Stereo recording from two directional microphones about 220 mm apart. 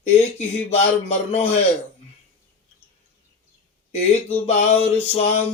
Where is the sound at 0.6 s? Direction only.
30° left (ahead or behind).